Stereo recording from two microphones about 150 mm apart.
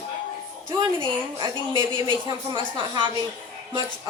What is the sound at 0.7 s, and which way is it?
A woman's voice, 30° right (ahead or behind).